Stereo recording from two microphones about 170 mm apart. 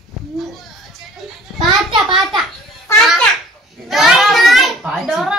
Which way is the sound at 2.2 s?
Centre (ahead or behind).